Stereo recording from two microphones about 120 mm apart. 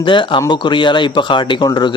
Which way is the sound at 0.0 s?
40° left (ahead or behind).